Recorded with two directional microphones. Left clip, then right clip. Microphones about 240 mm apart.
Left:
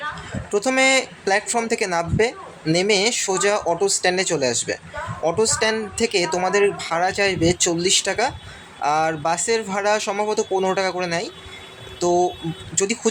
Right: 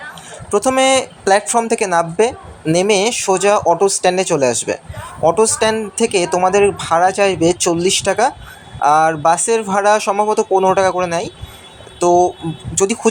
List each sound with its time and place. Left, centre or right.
0.8 s speech: centre